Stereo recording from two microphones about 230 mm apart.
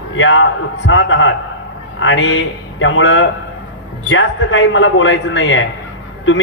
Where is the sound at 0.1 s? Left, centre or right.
Left.